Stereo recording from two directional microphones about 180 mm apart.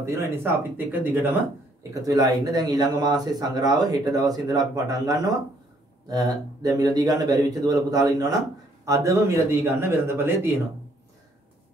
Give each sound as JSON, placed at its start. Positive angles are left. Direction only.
{"t": 0.0, "sound": "speech", "side_deg": -15}